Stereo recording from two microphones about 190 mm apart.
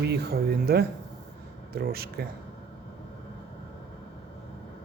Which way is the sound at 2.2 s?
55° right (ahead or behind).